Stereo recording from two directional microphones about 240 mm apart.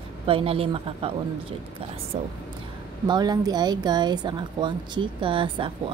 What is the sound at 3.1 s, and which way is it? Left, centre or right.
Speech, centre.